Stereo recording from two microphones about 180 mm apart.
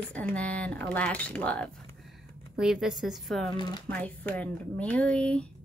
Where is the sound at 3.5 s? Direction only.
25° left (ahead or behind).